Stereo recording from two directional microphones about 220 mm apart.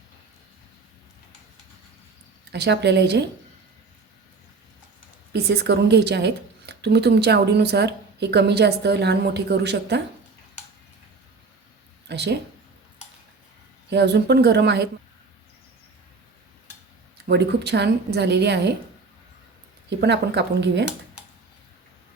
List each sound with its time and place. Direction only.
2.5 s speech: 50° right (ahead or behind)
5.3 s speech: 50° right (ahead or behind)
12.0 s speech: 50° right (ahead or behind)
13.9 s speech: 50° right (ahead or behind)
17.2 s speech: 50° right (ahead or behind)
20.0 s speech: 50° right (ahead or behind)